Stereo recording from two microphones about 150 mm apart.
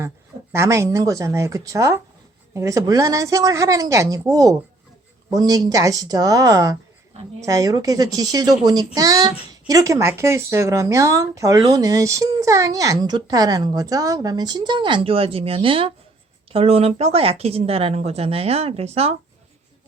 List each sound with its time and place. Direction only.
0.5 s a child's voice: 20° right (ahead or behind); by 19.1 s 40° right (ahead or behind)